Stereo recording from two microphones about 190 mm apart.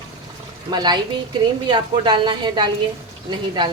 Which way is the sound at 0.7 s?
20° right (ahead or behind).